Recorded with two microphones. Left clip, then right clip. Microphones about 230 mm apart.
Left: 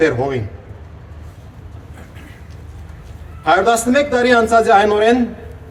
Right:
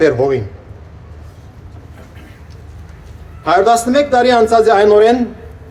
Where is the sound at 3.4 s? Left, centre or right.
Right.